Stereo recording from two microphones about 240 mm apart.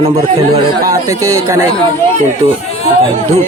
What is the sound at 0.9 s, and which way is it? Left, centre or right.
Speech, centre.